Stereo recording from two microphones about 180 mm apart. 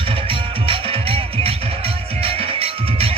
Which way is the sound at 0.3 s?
30° right (ahead or behind).